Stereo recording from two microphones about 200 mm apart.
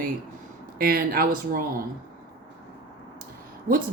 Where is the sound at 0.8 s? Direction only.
45° right (ahead or behind).